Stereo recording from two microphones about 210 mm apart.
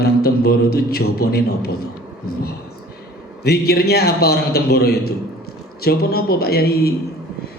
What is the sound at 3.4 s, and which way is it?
Speech, 50° left (ahead or behind).